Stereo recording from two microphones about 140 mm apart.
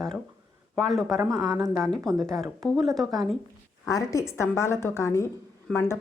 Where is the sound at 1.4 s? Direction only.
20° right (ahead or behind).